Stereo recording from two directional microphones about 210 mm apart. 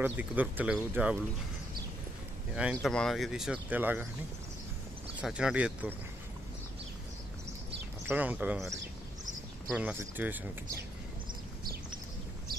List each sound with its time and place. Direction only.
0.0 s speech: 10° right (ahead or behind)
2.5 s speech: 5° right (ahead or behind)
5.2 s speech: 5° right (ahead or behind)
8.0 s speech: 10° right (ahead or behind)
9.8 s speech: 5° right (ahead or behind)
11.6 s horse: 45° right (ahead or behind)